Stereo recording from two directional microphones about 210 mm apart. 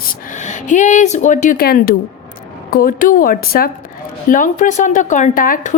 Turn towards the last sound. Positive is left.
turn(degrees=40)  # may be behind; listen again after turning